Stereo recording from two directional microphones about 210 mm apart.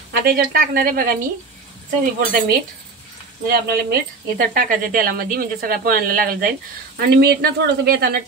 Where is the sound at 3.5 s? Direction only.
45° right (ahead or behind).